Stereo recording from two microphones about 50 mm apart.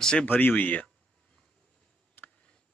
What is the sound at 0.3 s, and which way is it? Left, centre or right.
Speech, left.